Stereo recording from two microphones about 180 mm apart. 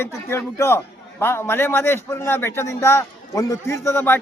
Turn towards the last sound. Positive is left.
turn(degrees=15)  # may be behind; listen again after turning